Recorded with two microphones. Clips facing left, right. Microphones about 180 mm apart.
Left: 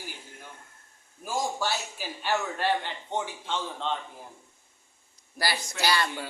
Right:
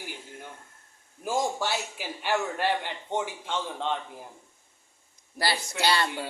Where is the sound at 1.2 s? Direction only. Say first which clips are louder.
Right 2 dB; 15° right (ahead or behind).